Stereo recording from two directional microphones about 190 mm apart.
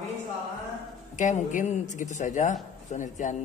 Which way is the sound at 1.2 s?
40° left (ahead or behind).